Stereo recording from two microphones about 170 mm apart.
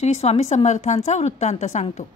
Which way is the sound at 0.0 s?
40° left (ahead or behind).